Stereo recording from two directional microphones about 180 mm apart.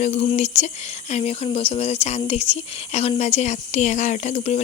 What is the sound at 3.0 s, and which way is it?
Speech, 35° left (ahead or behind).